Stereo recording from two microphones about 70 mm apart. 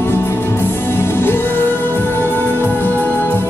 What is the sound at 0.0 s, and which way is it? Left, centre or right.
Music, left.